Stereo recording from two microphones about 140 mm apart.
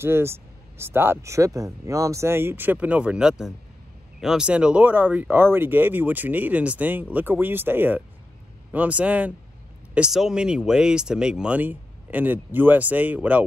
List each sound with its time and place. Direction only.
0.0 s speech: 15° right (ahead or behind)